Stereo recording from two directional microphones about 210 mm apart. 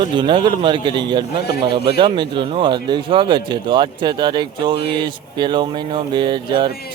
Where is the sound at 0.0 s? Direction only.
25° right (ahead or behind).